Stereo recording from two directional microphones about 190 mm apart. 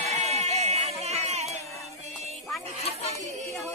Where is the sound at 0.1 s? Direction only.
35° right (ahead or behind).